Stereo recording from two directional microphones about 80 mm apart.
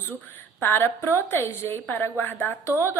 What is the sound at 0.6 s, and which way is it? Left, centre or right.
A woman's voice, left.